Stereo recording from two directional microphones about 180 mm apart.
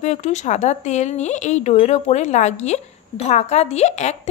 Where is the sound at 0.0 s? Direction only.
40° left (ahead or behind).